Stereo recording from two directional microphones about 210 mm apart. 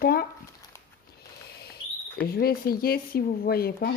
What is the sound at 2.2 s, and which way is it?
Speech, 45° left (ahead or behind).